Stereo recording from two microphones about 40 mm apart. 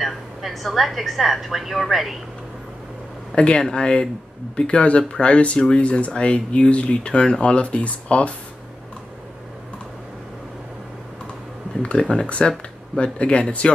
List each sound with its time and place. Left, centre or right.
0.0 s a woman's voice: centre
3.3 s speech: left
11.8 s speech: left